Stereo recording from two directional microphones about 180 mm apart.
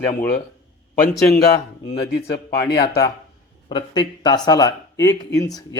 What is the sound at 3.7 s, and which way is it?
Speech, 25° left (ahead or behind).